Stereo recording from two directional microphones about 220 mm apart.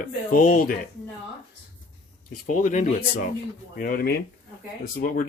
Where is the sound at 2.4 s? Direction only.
35° left (ahead or behind).